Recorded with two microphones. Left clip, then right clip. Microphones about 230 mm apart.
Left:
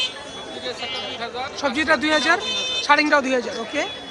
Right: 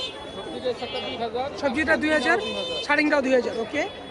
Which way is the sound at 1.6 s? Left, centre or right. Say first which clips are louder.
Left 3 dB; centre.